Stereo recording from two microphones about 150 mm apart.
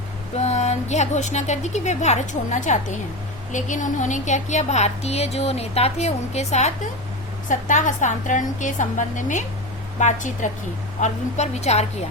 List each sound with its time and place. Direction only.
0.3 s a woman's voice: 45° left (ahead or behind)